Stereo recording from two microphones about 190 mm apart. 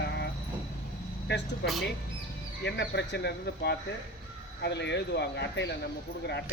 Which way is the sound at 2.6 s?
65° left (ahead or behind).